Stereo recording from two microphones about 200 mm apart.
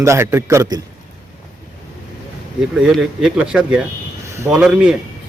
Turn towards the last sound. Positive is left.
turn(degrees=-5)  # may be behind; listen again after turning